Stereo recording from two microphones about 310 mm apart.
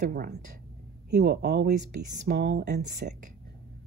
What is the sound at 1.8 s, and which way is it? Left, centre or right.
Speech, right.